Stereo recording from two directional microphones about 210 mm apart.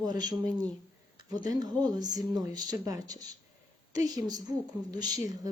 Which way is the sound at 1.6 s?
20° right (ahead or behind).